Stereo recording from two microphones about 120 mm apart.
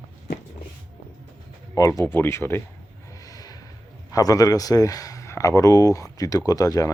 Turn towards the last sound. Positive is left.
turn(degrees=30)  # may be behind; listen again after turning